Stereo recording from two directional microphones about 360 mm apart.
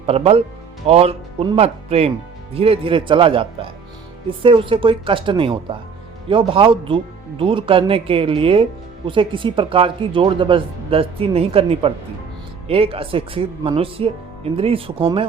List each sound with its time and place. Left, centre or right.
0.0 s speech: centre